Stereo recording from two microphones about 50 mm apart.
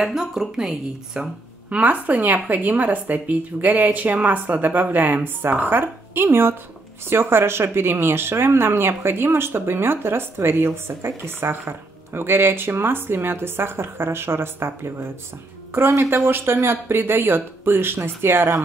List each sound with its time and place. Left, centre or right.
0.0 s a woman's voice: centre
1.7 s a woman's voice: right
16.3 s speech: right